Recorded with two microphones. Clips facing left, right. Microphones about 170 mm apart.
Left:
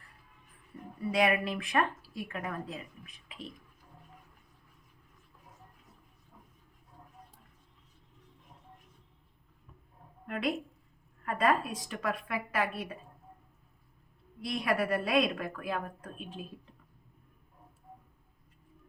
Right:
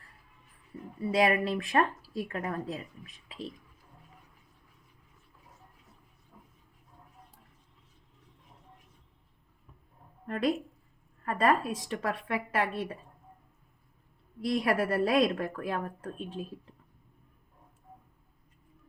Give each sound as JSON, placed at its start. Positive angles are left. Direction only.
{"t": 1.1, "sound": "a woman's voice", "side_deg": -30}
{"t": 10.2, "sound": "a woman's voice", "side_deg": -35}
{"t": 14.5, "sound": "a woman's voice", "side_deg": -40}